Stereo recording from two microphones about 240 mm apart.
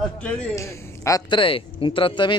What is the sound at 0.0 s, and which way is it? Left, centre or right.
A man's voice, centre.